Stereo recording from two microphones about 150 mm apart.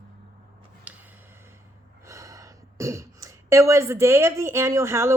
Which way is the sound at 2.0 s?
20° right (ahead or behind).